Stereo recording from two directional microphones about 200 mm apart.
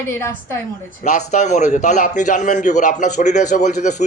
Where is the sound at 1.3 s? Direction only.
35° left (ahead or behind).